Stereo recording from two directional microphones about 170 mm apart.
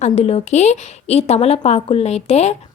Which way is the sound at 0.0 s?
40° left (ahead or behind).